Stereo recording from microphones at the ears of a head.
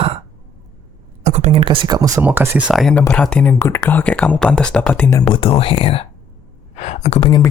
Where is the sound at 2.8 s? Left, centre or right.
Left.